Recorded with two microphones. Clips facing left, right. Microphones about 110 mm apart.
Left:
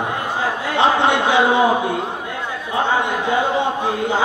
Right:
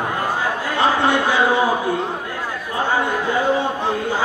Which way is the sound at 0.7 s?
25° left (ahead or behind).